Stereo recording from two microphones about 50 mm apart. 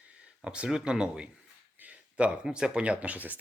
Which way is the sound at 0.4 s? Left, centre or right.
Right.